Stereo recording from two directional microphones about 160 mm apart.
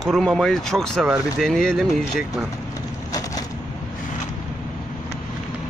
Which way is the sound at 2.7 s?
20° left (ahead or behind).